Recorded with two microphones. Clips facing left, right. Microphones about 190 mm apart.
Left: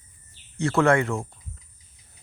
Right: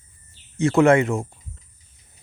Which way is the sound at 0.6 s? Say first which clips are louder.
Right 5 dB; 20° right (ahead or behind).